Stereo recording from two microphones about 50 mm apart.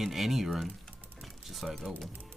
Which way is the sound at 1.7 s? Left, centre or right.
Centre.